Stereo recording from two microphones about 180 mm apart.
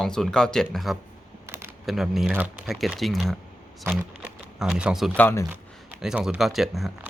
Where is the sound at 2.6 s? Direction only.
Centre (ahead or behind).